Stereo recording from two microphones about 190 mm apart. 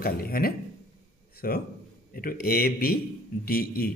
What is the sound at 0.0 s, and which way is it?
A man's voice, 50° left (ahead or behind).